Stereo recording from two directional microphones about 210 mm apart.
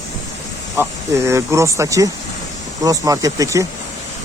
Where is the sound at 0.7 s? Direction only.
10° right (ahead or behind).